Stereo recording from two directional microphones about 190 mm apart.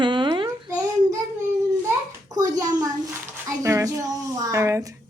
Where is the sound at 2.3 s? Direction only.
20° right (ahead or behind).